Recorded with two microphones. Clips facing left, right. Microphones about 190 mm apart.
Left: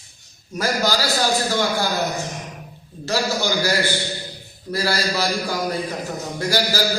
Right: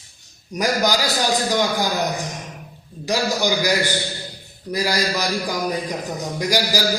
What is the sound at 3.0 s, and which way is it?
A man's voice, 15° right (ahead or behind).